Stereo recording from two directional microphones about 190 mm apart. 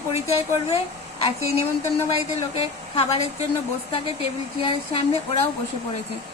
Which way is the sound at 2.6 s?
30° left (ahead or behind).